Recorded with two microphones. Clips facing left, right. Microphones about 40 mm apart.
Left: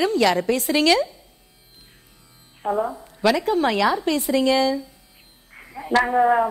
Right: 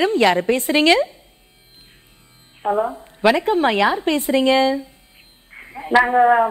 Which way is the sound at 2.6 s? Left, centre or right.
Right.